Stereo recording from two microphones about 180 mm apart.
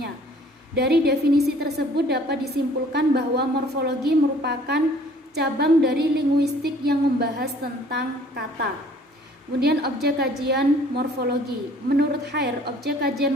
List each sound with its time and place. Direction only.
0.8 s a woman's voice: 65° right (ahead or behind)
9.6 s a woman's voice: 65° right (ahead or behind)